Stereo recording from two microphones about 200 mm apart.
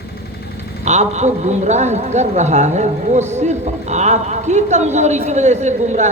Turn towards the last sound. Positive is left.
turn(degrees=-35)  # may be behind; listen again after turning